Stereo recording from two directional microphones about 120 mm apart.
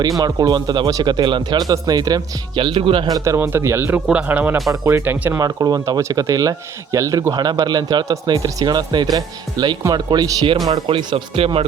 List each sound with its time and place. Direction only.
0.2 s speech: 35° right (ahead or behind)
3.1 s speech: 25° right (ahead or behind)
5.4 s speech: 30° right (ahead or behind)
10.8 s speech: 50° right (ahead or behind)